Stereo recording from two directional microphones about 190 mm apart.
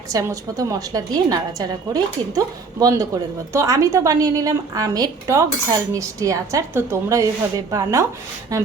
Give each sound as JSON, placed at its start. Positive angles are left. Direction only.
{"t": 0.1, "sound": "a woman's voice", "side_deg": -20}